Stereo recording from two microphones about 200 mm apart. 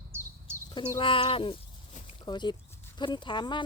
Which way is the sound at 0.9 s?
25° left (ahead or behind).